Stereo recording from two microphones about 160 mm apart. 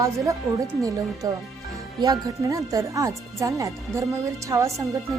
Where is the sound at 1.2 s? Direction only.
25° right (ahead or behind).